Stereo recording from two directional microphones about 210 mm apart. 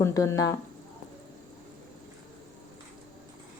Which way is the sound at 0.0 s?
15° left (ahead or behind).